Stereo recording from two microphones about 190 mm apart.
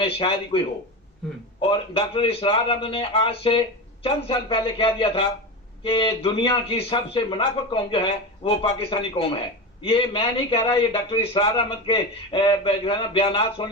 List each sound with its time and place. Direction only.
0.0 s a man's voice: 30° left (ahead or behind)
1.6 s a man's voice: 30° left (ahead or behind)